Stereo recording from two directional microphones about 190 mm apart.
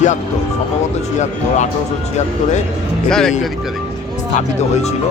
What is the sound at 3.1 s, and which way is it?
Speech, 5° left (ahead or behind).